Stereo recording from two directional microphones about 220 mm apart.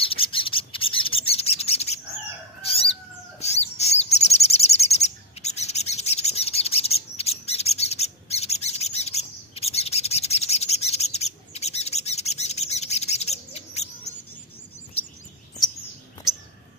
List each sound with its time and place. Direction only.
0.0 s bird: 25° left (ahead or behind)